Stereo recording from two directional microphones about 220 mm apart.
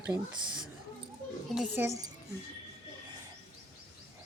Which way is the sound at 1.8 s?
15° right (ahead or behind).